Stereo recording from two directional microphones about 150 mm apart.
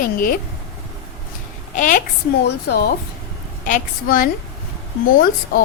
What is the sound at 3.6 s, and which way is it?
A woman's voice, 60° left (ahead or behind).